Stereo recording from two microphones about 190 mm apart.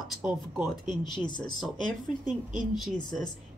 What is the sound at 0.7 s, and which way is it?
Speech, 25° left (ahead or behind).